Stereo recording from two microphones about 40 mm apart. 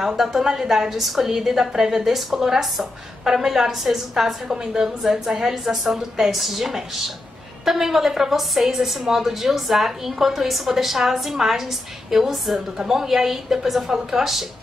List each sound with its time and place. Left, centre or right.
0.0 s a woman's voice: centre